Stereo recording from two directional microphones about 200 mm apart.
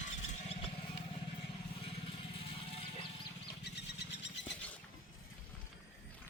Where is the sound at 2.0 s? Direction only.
25° left (ahead or behind).